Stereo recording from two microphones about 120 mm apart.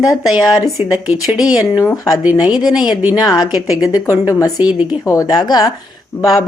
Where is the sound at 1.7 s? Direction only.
30° left (ahead or behind).